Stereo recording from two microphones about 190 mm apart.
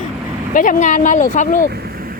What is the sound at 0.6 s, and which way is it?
Speech, 45° left (ahead or behind).